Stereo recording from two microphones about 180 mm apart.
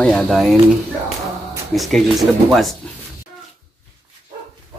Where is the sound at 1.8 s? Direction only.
Centre (ahead or behind).